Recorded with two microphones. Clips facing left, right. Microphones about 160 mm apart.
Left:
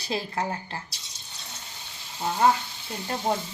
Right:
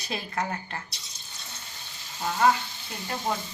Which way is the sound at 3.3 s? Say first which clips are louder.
Left 3 dB; 35° left (ahead or behind).